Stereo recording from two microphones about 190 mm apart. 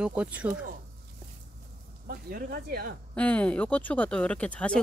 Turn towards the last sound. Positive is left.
turn(degrees=5)  # may be behind; listen again after turning